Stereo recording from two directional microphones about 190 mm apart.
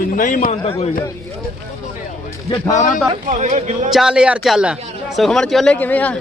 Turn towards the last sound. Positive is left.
turn(degrees=10)  # may be behind; listen again after turning